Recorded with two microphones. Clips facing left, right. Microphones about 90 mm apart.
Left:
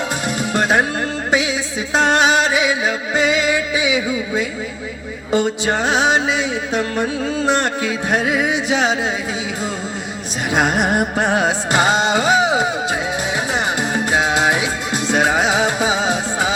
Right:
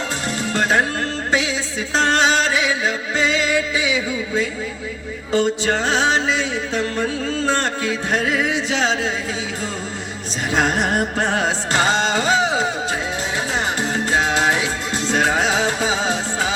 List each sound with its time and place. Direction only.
0.3 s music: 15° left (ahead or behind)
2.0 s music: 15° left (ahead or behind)
10.5 s music: 15° left (ahead or behind)
13.9 s music: 15° left (ahead or behind)